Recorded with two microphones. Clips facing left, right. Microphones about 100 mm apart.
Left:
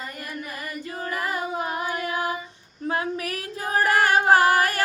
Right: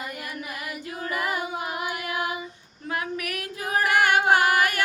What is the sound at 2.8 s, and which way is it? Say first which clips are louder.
Female singing: left 3 dB; 30° left (ahead or behind).